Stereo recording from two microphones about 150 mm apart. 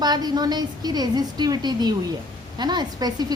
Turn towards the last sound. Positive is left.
turn(degrees=-25)  # may be behind; listen again after turning